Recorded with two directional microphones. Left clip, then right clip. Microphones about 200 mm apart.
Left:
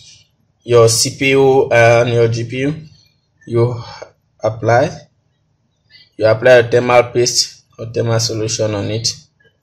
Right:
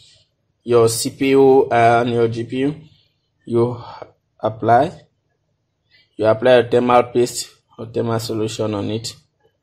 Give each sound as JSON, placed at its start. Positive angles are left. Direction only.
{"t": 0.7, "sound": "speech", "side_deg": -25}
{"t": 6.1, "sound": "speech", "side_deg": -25}